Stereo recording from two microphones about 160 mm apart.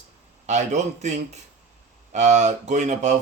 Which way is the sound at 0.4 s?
45° right (ahead or behind).